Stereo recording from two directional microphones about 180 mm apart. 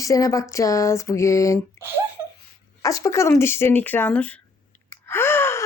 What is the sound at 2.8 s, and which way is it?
Speech, 20° left (ahead or behind).